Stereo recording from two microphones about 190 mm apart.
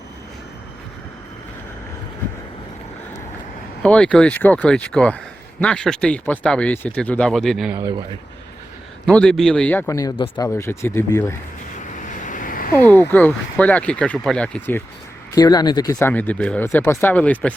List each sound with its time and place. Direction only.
3.8 s speech: 5° left (ahead or behind)
9.0 s speech: 5° left (ahead or behind)
11.9 s a sound: 45° left (ahead or behind)
12.8 s speech: 10° left (ahead or behind)
15.4 s speech: 20° left (ahead or behind)